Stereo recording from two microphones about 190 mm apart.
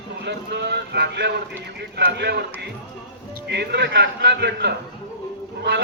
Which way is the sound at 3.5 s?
65° right (ahead or behind).